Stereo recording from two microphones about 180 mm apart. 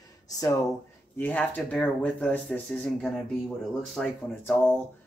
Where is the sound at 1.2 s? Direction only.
10° left (ahead or behind).